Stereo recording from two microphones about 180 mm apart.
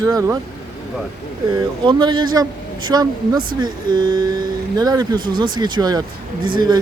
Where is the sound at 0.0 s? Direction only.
20° right (ahead or behind).